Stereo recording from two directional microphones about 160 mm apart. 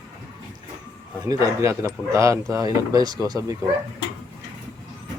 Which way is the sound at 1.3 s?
20° right (ahead or behind).